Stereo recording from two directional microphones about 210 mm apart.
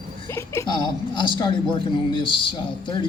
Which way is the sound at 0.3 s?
10° left (ahead or behind).